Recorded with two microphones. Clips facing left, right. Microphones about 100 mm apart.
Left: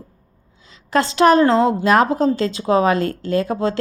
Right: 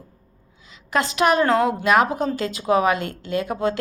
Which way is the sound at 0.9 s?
30° left (ahead or behind).